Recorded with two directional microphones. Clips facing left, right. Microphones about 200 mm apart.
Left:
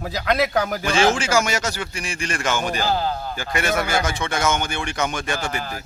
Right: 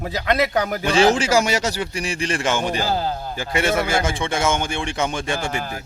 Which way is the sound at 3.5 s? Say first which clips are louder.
Right 2 dB; 25° right (ahead or behind).